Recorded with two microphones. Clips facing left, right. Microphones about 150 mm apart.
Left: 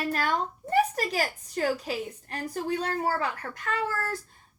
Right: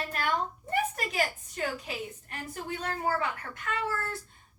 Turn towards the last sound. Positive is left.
turn(degrees=40)  # may be behind; listen again after turning